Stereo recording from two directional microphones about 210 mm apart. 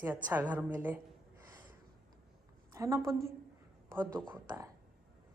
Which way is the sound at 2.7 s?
15° right (ahead or behind).